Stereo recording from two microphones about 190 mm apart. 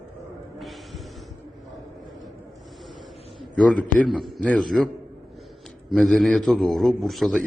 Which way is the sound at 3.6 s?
5° left (ahead or behind).